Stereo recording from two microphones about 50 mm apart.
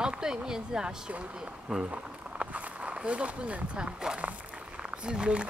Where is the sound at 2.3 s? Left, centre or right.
Centre.